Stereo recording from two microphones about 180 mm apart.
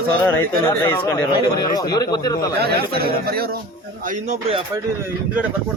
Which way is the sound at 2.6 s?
60° right (ahead or behind).